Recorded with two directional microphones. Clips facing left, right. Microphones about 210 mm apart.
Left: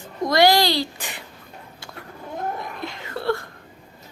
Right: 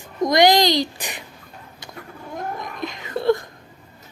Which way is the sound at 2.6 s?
15° right (ahead or behind).